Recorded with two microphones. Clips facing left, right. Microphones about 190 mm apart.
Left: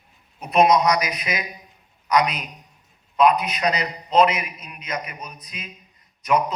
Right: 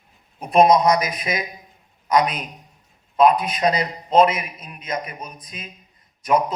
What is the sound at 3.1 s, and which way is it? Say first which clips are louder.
A man's voice: right 2 dB; 30° right (ahead or behind).